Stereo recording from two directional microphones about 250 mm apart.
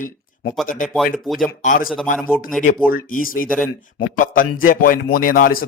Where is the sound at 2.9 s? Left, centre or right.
Left.